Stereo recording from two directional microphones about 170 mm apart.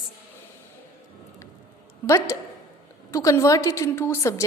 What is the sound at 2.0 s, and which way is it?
A woman's voice, 15° left (ahead or behind).